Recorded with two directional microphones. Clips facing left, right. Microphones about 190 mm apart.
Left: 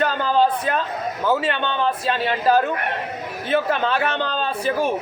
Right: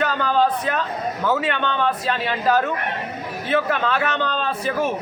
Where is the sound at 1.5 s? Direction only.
30° left (ahead or behind).